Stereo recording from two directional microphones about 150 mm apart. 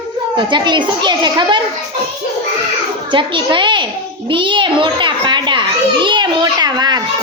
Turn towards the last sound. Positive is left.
turn(degrees=-25)  # may be behind; listen again after turning